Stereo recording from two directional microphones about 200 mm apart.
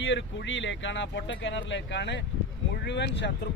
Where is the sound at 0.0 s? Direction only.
65° left (ahead or behind).